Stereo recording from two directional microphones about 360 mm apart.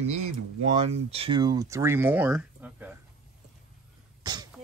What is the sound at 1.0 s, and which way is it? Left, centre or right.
Speech, centre.